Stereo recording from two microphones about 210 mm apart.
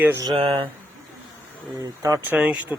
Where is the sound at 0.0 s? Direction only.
15° right (ahead or behind).